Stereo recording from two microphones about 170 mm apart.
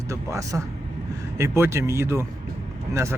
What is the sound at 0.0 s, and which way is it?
Speech, 20° right (ahead or behind).